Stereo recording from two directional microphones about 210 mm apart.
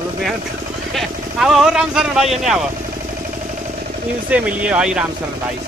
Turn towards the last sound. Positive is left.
turn(degrees=-5)  # may be behind; listen again after turning